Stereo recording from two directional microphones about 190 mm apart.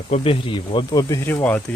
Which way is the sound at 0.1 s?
25° left (ahead or behind).